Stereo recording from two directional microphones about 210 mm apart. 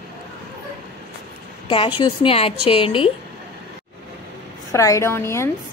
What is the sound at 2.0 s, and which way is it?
A woman's voice, 25° left (ahead or behind).